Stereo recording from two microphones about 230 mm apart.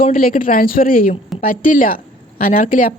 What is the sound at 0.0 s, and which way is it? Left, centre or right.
Speech, left.